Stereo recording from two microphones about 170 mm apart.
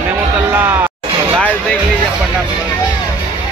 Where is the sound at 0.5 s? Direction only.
10° right (ahead or behind).